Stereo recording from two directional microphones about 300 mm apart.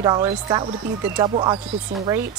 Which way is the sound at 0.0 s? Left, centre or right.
Centre.